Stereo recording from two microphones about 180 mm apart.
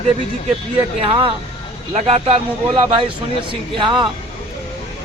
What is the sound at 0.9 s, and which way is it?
Speech, 30° right (ahead or behind).